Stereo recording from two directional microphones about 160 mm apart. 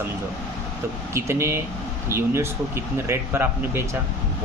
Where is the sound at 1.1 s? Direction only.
15° right (ahead or behind).